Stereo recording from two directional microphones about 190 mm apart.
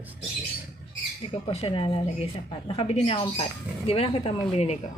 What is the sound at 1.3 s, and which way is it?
A woman's voice, 30° left (ahead or behind).